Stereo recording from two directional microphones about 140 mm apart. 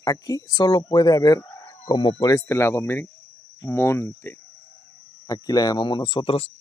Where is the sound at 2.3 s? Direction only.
20° left (ahead or behind); by 6.5 s 40° left (ahead or behind).